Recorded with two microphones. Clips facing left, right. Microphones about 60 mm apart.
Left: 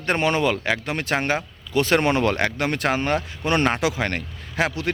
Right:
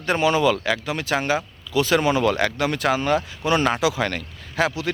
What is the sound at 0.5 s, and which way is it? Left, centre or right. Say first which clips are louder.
Speech: right 1 dB; left.